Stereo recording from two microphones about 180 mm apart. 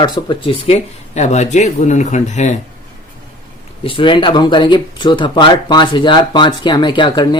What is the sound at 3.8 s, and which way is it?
Speech, 30° left (ahead or behind).